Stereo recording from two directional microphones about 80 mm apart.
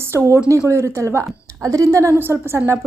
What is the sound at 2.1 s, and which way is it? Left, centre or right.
Speech, right.